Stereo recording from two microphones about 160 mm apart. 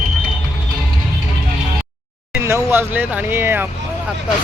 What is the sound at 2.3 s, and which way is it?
Speech, 15° right (ahead or behind).